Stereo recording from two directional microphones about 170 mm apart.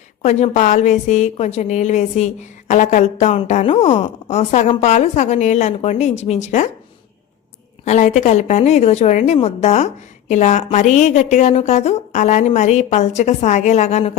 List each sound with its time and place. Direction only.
0.2 s a woman's voice: 40° left (ahead or behind)
7.9 s a woman's voice: 45° left (ahead or behind)